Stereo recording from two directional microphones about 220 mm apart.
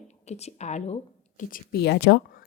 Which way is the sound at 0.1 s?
30° left (ahead or behind).